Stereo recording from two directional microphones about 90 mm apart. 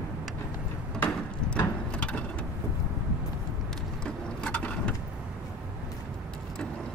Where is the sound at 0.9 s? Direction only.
15° left (ahead or behind).